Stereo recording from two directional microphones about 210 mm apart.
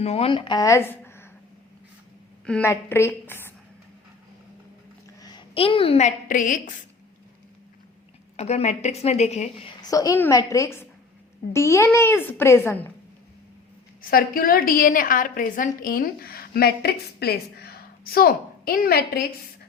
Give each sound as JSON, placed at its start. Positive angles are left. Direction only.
{"t": 0.0, "sound": "a woman's voice", "side_deg": 30}
{"t": 2.5, "sound": "speech", "side_deg": 10}
{"t": 5.2, "sound": "a woman's voice", "side_deg": 20}
{"t": 8.4, "sound": "a woman's voice", "side_deg": 30}
{"t": 14.0, "sound": "a woman's voice", "side_deg": 45}